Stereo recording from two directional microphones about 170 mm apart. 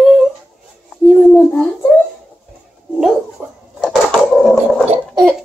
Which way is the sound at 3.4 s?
10° right (ahead or behind).